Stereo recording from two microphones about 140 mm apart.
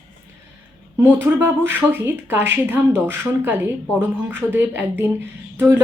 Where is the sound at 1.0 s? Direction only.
20° right (ahead or behind).